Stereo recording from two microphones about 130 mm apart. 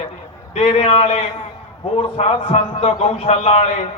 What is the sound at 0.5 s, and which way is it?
A man's voice, 50° left (ahead or behind).